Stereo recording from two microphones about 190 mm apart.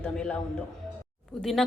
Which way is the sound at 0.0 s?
5° left (ahead or behind).